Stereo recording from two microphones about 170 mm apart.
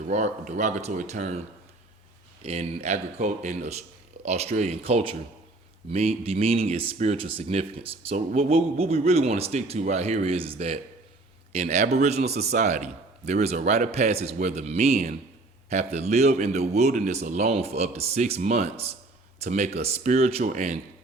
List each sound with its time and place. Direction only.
0.0 s speech: 45° right (ahead or behind)
2.4 s speech: 40° right (ahead or behind)